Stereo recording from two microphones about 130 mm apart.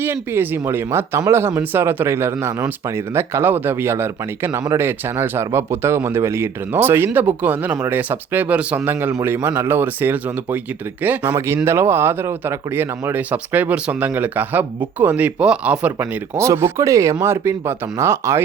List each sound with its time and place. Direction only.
0.0 s speech: 15° right (ahead or behind)